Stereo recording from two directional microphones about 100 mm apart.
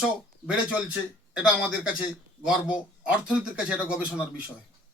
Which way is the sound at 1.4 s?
10° right (ahead or behind).